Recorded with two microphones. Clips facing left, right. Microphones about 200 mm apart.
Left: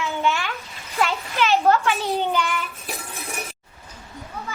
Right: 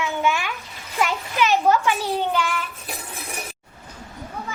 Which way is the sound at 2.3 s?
Centre (ahead or behind).